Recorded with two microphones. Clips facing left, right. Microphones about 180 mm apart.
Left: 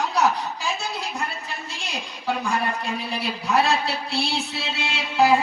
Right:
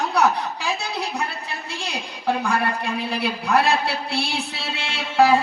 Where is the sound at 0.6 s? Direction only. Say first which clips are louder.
Right 2 dB; 65° right (ahead or behind).